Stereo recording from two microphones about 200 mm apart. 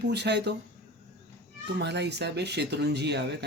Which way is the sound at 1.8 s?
60° right (ahead or behind).